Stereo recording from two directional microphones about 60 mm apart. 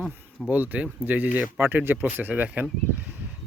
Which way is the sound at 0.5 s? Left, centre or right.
Right.